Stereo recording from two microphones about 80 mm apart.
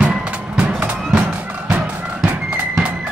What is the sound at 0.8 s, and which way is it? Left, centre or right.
Music, right.